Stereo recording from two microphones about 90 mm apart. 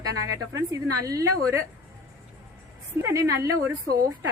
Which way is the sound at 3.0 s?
35° right (ahead or behind).